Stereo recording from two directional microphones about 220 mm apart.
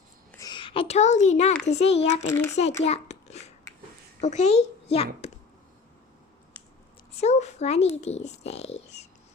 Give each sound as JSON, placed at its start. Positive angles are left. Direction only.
{"t": 0.3, "sound": "a child's voice", "side_deg": 15}
{"t": 2.2, "sound": "a child's voice", "side_deg": 15}
{"t": 2.6, "sound": "a sound", "side_deg": 30}
{"t": 4.2, "sound": "a child's voice", "side_deg": 30}
{"t": 7.1, "sound": "a child's voice", "side_deg": 30}